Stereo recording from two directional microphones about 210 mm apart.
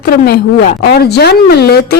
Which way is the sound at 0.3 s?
50° left (ahead or behind).